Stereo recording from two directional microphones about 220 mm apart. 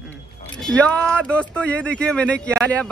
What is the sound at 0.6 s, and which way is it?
Speech, 5° left (ahead or behind).